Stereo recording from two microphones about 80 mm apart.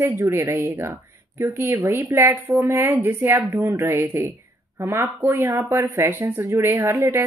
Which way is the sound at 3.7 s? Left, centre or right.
Right.